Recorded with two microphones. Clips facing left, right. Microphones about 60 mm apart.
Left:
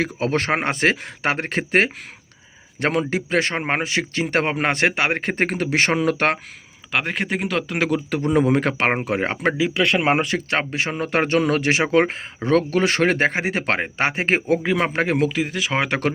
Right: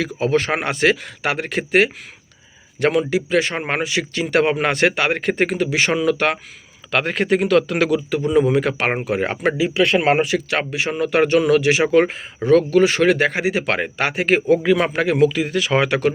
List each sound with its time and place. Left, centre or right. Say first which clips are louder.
0.2 s a man's voice: right 4 dB; left
6.9 s speech: right 5 dB; centre
8.1 s a man's voice: even; left
14.6 s speech: right 3 dB; centre